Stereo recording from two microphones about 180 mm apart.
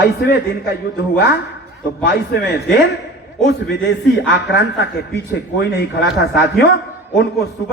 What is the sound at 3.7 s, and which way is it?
A man's voice, 70° left (ahead or behind).